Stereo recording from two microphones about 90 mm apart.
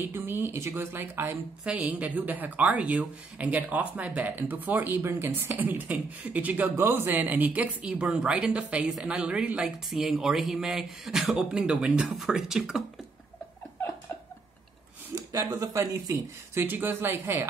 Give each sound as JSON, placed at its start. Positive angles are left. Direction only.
{"t": 0.0, "sound": "speech", "side_deg": -25}
{"t": 1.7, "sound": "speech", "side_deg": -15}
{"t": 15.3, "sound": "speech", "side_deg": -40}
{"t": 16.5, "sound": "speech", "side_deg": -20}